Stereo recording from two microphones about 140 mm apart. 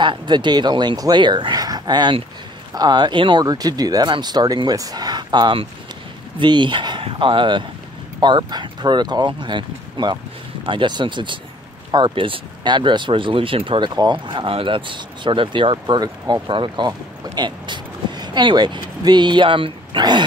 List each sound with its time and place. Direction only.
0.0 s speech: 35° right (ahead or behind)